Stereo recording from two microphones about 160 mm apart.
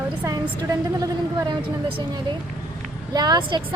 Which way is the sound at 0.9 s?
20° right (ahead or behind).